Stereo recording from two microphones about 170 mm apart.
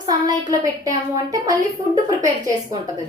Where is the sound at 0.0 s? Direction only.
25° right (ahead or behind).